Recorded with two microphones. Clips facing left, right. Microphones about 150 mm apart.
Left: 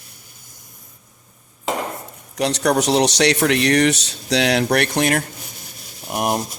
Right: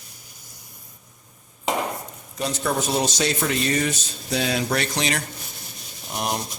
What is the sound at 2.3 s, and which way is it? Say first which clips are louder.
A man's voice: left 7 dB; 75° left (ahead or behind).